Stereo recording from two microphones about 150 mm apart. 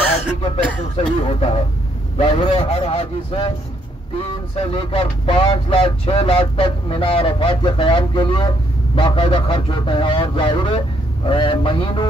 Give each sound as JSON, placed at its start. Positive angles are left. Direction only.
{"t": 0.9, "sound": "speech", "side_deg": 45}
{"t": 4.6, "sound": "speech", "side_deg": 35}